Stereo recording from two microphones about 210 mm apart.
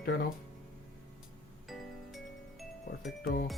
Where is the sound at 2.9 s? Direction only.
45° left (ahead or behind).